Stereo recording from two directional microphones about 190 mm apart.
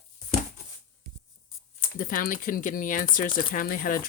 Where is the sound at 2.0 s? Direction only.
45° left (ahead or behind).